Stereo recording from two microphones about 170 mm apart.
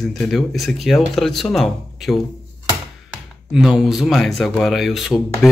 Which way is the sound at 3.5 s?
Centre (ahead or behind).